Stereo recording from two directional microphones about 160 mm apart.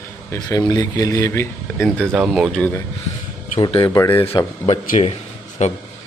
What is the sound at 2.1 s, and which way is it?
Speech, 5° right (ahead or behind).